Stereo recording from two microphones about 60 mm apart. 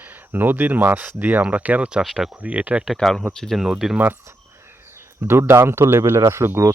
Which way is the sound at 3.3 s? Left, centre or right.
Centre.